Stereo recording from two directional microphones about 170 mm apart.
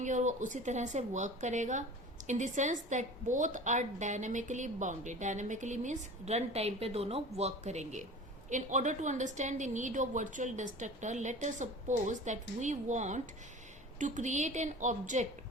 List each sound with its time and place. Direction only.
0.0 s a woman's voice: 45° right (ahead or behind)